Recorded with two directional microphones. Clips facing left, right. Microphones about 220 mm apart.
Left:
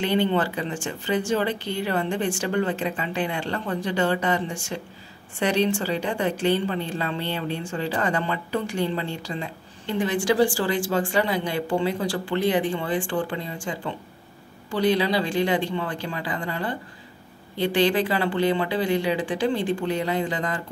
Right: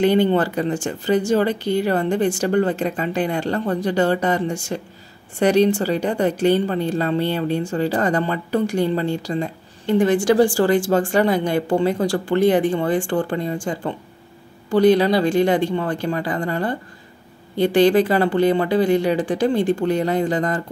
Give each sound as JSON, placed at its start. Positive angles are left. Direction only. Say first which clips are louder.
{"t": 0.0, "sound": "a woman's voice", "louder": "right 6 dB", "side_deg": -45}